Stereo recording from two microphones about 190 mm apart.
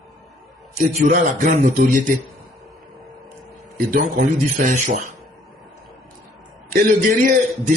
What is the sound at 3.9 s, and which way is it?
Speech, 45° right (ahead or behind).